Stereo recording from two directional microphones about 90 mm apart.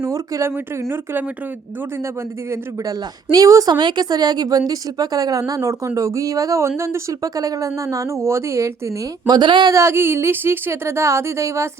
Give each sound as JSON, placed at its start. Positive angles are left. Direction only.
{"t": 0.0, "sound": "a woman's voice", "side_deg": -35}
{"t": 0.5, "sound": "a woman's voice", "side_deg": -25}
{"t": 3.3, "sound": "a woman's voice", "side_deg": -40}
{"t": 3.8, "sound": "a woman's voice", "side_deg": -55}
{"t": 9.2, "sound": "speech", "side_deg": -55}
{"t": 9.7, "sound": "a woman's voice", "side_deg": -30}